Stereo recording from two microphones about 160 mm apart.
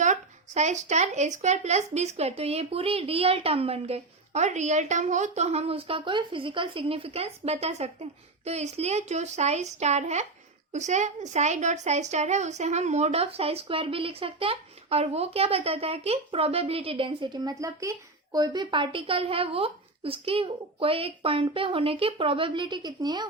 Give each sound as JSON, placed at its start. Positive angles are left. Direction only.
{"t": 0.0, "sound": "a woman's voice", "side_deg": -50}